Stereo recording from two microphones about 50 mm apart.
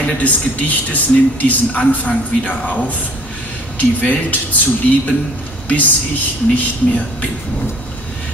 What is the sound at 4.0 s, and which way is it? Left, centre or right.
Speech, left.